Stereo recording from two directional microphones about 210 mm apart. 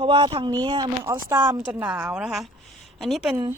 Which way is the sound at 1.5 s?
5° right (ahead or behind).